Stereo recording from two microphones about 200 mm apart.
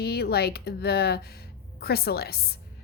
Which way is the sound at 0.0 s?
50° left (ahead or behind).